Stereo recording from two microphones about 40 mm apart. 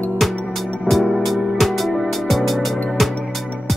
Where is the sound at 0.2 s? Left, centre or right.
Centre.